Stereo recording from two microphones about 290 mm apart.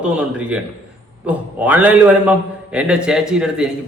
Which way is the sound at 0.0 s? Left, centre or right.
Centre.